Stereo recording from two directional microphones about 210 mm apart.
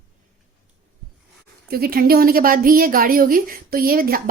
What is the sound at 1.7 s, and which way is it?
A woman's voice, 45° right (ahead or behind).